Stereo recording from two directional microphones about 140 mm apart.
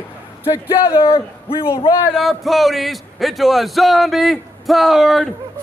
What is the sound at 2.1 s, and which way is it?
Speech, centre (ahead or behind).